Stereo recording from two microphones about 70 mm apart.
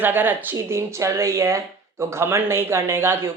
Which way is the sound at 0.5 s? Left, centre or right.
Right.